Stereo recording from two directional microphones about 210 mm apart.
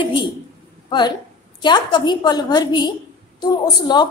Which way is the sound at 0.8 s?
20° left (ahead or behind).